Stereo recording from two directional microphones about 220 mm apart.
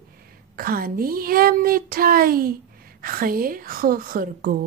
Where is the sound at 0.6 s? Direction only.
40° right (ahead or behind).